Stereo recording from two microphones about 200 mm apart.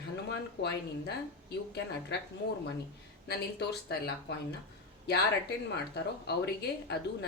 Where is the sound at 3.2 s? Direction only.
55° left (ahead or behind).